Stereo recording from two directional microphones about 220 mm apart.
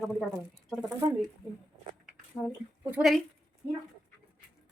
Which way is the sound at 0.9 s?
10° right (ahead or behind).